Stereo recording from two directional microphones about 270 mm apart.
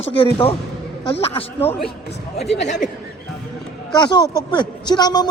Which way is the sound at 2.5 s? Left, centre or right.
Left.